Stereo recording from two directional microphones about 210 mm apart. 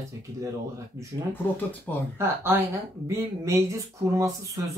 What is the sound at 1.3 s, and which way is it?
Speech, 10° left (ahead or behind).